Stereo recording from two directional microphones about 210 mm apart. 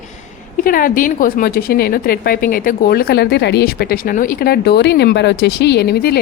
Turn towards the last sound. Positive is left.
turn(degrees=50)  # may be behind; listen again after turning